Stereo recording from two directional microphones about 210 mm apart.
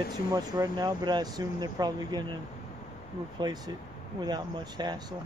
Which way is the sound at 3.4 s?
20° right (ahead or behind).